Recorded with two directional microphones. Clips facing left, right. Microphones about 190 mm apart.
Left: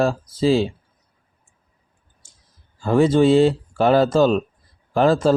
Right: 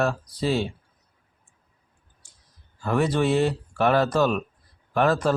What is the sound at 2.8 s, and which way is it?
Speech, 25° left (ahead or behind).